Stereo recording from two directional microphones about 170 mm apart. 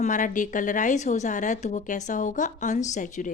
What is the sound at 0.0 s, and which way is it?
A woman's voice, 50° left (ahead or behind).